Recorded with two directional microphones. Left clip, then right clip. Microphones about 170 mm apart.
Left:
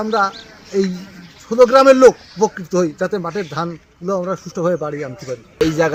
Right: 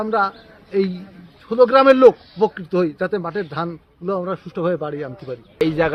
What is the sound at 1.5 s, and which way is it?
Speech, 25° right (ahead or behind).